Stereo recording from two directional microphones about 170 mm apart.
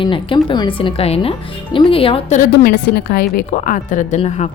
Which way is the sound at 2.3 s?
60° left (ahead or behind).